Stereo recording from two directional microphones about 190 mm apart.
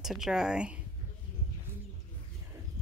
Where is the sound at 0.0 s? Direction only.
Centre (ahead or behind).